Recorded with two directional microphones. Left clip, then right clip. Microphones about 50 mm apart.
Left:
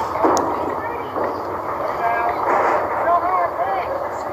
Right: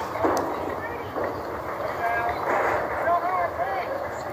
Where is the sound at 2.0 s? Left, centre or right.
Left.